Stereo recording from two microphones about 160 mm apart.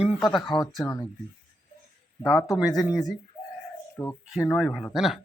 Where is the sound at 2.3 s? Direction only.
20° left (ahead or behind).